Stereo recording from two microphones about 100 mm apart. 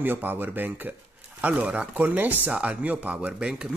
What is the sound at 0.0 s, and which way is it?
Speech, 20° right (ahead or behind).